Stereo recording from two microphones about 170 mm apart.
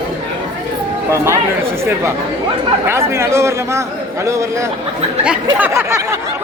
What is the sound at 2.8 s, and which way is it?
Speech, 15° right (ahead or behind).